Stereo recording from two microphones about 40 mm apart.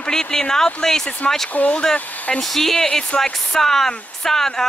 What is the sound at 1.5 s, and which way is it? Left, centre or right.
Speech, left.